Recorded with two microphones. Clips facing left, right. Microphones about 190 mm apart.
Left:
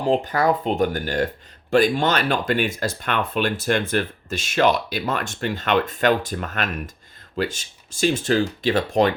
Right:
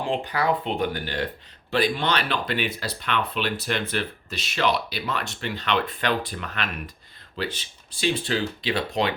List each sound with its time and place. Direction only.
0.0 s speech: 45° left (ahead or behind)